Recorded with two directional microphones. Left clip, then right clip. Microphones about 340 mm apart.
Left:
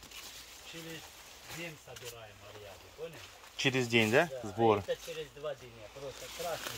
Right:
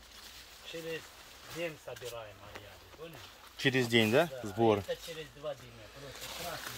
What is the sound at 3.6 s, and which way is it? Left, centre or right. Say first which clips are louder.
Speech: right 1 dB; centre.